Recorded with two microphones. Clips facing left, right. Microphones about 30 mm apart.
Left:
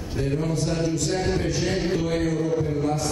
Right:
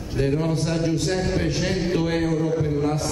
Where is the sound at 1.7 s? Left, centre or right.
Centre.